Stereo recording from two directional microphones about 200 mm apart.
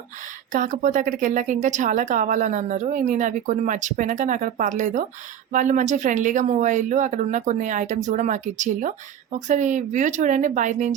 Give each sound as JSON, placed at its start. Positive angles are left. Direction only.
{"t": 0.5, "sound": "speech", "side_deg": -40}